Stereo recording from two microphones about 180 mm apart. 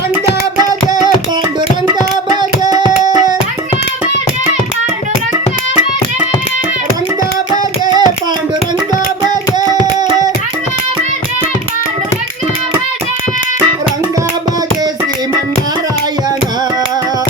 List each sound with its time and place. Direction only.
2.0 s hands: 25° right (ahead or behind)
7.5 s a sound: 20° right (ahead or behind)
9.2 s child singing: 25° right (ahead or behind)